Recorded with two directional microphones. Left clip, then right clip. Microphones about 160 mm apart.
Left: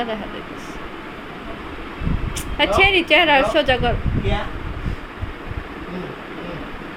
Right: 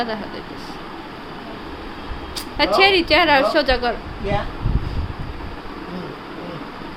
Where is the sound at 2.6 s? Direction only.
Centre (ahead or behind).